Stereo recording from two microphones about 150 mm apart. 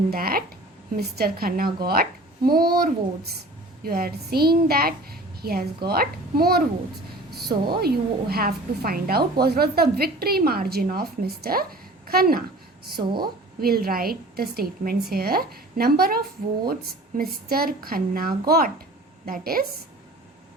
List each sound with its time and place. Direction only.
0.1 s a woman's voice: 85° right
12.1 s a woman's voice: 80° right
13.0 s a woman's voice: 30° right (ahead or behind)
13.6 s a woman's voice: 90° right
19.2 s a woman's voice: 75° right (ahead or behind)